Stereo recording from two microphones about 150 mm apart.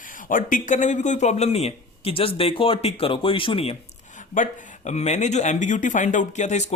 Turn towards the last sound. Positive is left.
turn(degrees=50)  # may be behind; listen again after turning